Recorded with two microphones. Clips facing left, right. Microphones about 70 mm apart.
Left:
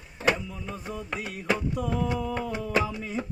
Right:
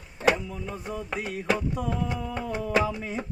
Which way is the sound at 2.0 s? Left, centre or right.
Right.